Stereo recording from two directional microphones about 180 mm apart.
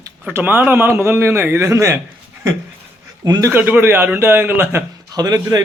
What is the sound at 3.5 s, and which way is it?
A man's voice, 10° right (ahead or behind).